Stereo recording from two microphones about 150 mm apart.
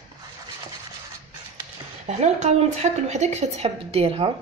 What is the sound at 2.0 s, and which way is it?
A woman's voice, 50° right (ahead or behind).